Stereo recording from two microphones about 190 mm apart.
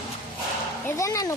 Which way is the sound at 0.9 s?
15° left (ahead or behind).